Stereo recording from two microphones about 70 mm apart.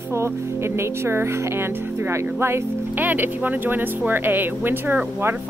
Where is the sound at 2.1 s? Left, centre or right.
Right.